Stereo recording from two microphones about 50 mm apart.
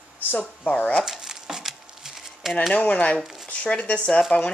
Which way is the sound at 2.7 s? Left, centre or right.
Left.